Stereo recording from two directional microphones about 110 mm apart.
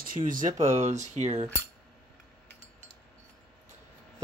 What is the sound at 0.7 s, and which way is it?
Speech, 90° right.